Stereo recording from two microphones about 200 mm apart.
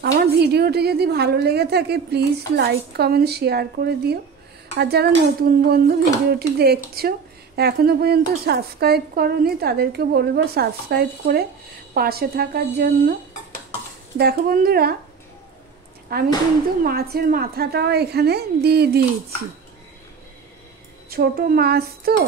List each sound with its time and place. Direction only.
0.0 s a woman's voice: 55° right (ahead or behind)
14.1 s a woman's voice: 50° right (ahead or behind)
16.1 s a woman's voice: 50° right (ahead or behind)
21.1 s a woman's voice: 50° right (ahead or behind)